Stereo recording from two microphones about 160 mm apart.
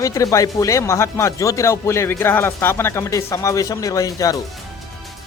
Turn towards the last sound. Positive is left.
turn(degrees=20)  # may be behind; listen again after turning